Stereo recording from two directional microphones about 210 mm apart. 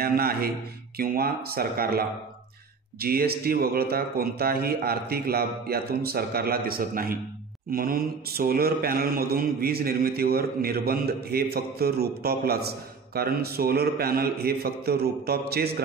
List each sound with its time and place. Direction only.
0.0 s mantra: 45° right (ahead or behind)